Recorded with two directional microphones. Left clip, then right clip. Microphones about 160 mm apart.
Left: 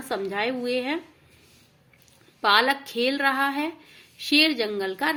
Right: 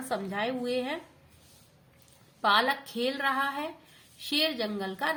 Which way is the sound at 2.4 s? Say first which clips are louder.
Left 5 dB; 20° left (ahead or behind).